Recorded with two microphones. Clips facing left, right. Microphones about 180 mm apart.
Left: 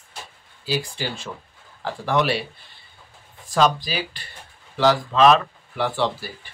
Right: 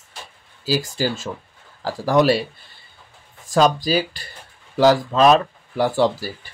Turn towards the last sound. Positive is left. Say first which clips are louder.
# right 5 dB
turn(degrees=-40)  # may be behind; listen again after turning